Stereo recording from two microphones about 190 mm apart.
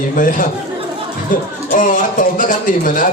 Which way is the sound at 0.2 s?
45° left (ahead or behind).